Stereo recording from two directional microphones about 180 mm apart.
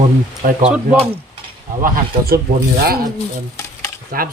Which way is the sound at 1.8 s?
55° right (ahead or behind).